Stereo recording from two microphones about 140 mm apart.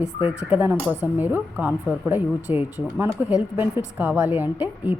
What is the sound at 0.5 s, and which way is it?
A woman's voice, 10° right (ahead or behind).